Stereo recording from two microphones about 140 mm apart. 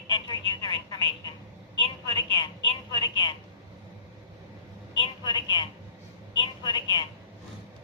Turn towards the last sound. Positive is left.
turn(degrees=35)  # may be behind; listen again after turning